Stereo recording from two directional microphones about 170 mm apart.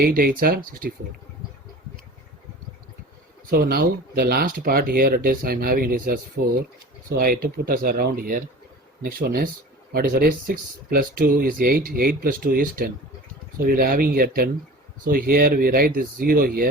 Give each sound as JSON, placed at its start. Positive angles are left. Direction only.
{"t": 0.0, "sound": "speech", "side_deg": -60}
{"t": 3.5, "sound": "speech", "side_deg": -65}